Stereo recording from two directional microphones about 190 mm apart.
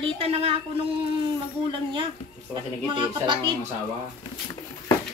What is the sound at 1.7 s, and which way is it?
Speech, 25° right (ahead or behind).